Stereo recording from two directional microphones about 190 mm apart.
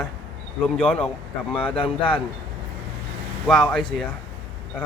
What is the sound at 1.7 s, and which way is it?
Speech, 25° left (ahead or behind).